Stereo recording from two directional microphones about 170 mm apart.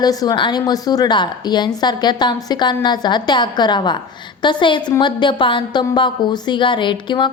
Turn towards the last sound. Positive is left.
turn(degrees=25)  # may be behind; listen again after turning